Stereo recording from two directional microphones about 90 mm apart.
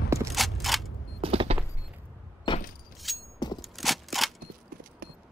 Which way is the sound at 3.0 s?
Centre (ahead or behind).